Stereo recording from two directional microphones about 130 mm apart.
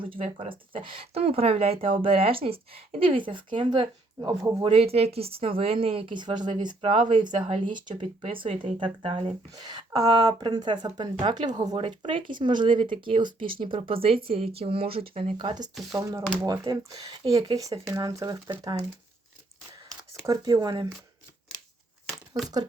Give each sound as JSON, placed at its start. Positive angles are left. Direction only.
{"t": 0.0, "sound": "speech", "side_deg": -45}
{"t": 4.2, "sound": "speech", "side_deg": -25}
{"t": 4.6, "sound": "speech", "side_deg": -45}
{"t": 8.0, "sound": "speech", "side_deg": -45}
{"t": 9.5, "sound": "speech", "side_deg": -30}
{"t": 16.0, "sound": "speech", "side_deg": -25}
{"t": 20.2, "sound": "speech", "side_deg": -35}